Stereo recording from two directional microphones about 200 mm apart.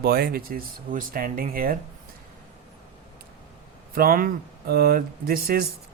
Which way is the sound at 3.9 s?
45° right (ahead or behind).